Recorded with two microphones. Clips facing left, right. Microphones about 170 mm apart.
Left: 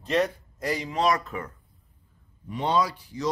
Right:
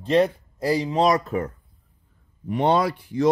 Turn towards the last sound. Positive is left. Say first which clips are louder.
# right 7 dB
turn(degrees=-55)  # may be behind; listen again after turning